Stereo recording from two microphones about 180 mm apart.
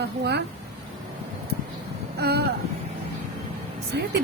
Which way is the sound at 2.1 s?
65° right (ahead or behind).